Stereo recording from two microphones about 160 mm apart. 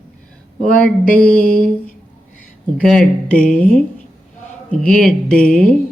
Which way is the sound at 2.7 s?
5° left (ahead or behind).